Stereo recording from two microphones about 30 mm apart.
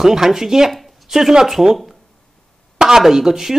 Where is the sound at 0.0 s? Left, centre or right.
Centre.